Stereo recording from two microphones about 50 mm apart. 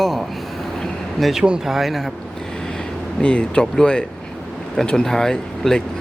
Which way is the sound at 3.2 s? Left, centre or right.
Centre.